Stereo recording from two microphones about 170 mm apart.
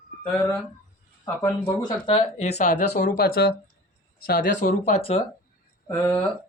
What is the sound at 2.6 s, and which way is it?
Speech, 45° left (ahead or behind).